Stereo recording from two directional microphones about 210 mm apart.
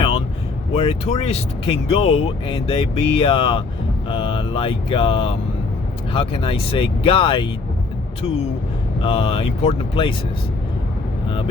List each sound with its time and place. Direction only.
0.7 s speech: 30° left (ahead or behind)
9.0 s speech: 25° left (ahead or behind)